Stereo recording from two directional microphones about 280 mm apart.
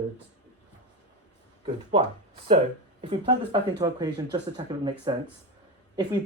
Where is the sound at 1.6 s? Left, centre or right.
Centre.